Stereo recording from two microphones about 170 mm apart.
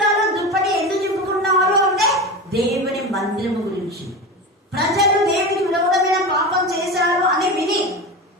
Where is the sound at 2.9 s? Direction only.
Centre (ahead or behind).